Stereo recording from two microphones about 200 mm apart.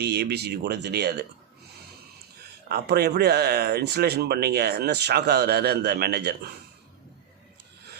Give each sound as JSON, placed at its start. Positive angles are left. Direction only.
{"t": 0.0, "sound": "speech", "side_deg": -55}
{"t": 2.6, "sound": "speech", "side_deg": -50}